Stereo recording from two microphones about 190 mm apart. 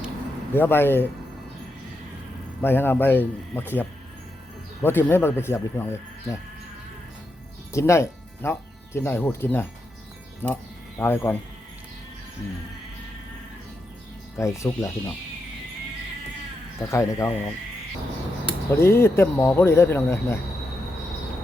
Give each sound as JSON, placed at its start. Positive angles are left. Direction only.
{"t": 0.5, "sound": "speech", "side_deg": 10}
{"t": 2.6, "sound": "speech", "side_deg": 10}
{"t": 7.7, "sound": "speech", "side_deg": 15}
{"t": 14.3, "sound": "speech", "side_deg": 15}
{"t": 16.9, "sound": "speech", "side_deg": 15}
{"t": 18.7, "sound": "speech", "side_deg": 15}